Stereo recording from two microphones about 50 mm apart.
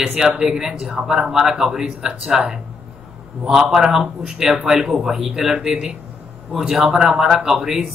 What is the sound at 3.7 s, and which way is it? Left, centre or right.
Speech, centre.